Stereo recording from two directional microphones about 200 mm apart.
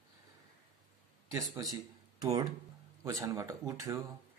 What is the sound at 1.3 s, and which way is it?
Speech, 15° right (ahead or behind).